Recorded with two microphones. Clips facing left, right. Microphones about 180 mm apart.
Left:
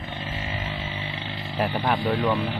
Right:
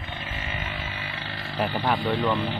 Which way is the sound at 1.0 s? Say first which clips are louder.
Left 2 dB; 20° left (ahead or behind).